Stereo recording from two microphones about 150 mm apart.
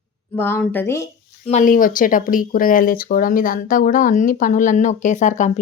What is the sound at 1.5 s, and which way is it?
A woman's voice, 55° left (ahead or behind).